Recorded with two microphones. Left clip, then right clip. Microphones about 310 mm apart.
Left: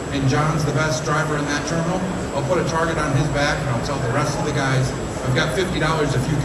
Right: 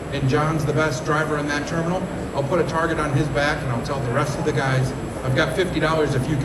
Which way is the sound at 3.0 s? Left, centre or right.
Centre.